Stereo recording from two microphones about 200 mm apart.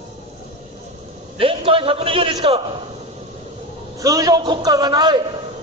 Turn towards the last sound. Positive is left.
turn(degrees=-20)  # may be behind; listen again after turning